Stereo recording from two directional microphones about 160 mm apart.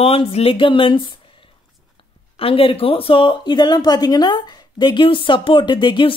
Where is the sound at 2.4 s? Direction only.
35° left (ahead or behind).